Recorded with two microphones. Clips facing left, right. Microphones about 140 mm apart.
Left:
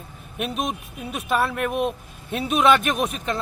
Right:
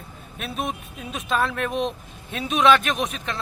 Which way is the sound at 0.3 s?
15° left (ahead or behind).